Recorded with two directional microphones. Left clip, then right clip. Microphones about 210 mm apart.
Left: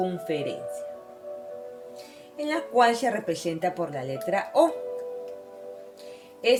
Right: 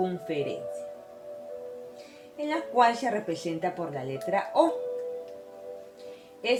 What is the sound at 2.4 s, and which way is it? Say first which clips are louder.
Speech: left 2 dB; 45° left (ahead or behind).